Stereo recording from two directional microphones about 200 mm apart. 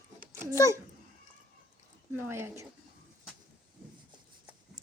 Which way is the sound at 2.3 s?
10° right (ahead or behind).